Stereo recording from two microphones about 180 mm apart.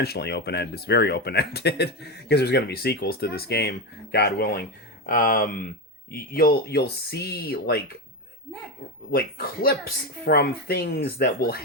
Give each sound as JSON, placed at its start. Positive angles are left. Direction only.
{"t": 0.0, "sound": "speech", "side_deg": 65}
{"t": 9.1, "sound": "speech", "side_deg": 55}